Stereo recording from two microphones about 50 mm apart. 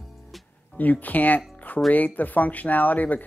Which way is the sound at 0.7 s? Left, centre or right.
Left.